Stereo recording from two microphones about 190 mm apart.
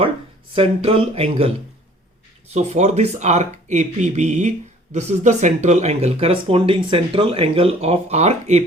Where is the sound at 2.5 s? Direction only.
35° right (ahead or behind).